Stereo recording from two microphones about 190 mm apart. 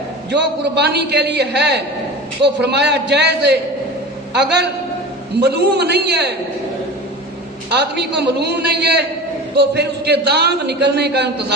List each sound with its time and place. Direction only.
0.3 s a man's voice: 60° right (ahead or behind)
5.4 s a man's voice: 60° right (ahead or behind)
7.8 s a man's voice: 60° right (ahead or behind)